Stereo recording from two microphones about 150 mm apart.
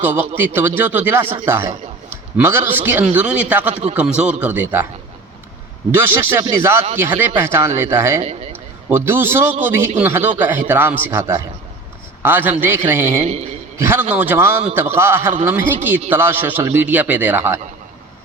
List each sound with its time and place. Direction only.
0.0 s a man's voice: 10° right (ahead or behind)
5.9 s a man's voice: 15° right (ahead or behind)